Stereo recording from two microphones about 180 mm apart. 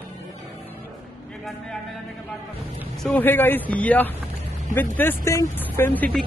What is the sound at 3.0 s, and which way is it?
Speech, 10° left (ahead or behind).